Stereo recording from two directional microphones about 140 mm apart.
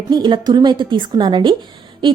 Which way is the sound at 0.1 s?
30° right (ahead or behind).